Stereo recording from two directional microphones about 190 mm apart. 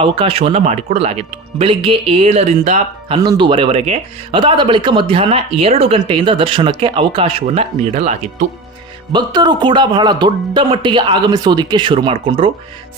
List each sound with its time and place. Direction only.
0.0 s speech: 30° right (ahead or behind)
3.2 s speech: 25° right (ahead or behind)
9.1 s speech: 25° right (ahead or behind)